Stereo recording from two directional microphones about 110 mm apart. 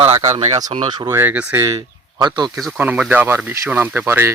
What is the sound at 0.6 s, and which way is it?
Speech, 70° right (ahead or behind).